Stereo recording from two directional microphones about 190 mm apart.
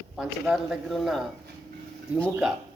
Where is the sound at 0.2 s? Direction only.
5° right (ahead or behind).